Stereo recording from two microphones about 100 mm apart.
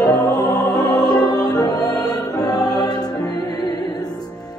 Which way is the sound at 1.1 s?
40° left (ahead or behind).